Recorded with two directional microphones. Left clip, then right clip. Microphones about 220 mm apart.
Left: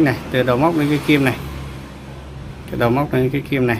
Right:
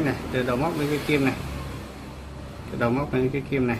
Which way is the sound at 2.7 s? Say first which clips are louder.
Left 7 dB; 45° left (ahead or behind).